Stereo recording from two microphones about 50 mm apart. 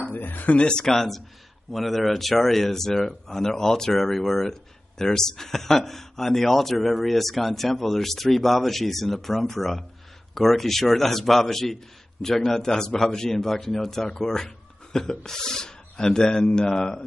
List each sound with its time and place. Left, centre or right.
0.1 s a sound: left
0.6 s a man's voice: centre
0.9 s a man's voice: centre